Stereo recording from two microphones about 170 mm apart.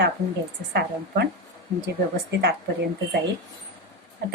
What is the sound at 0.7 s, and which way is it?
Speech, 75° right (ahead or behind).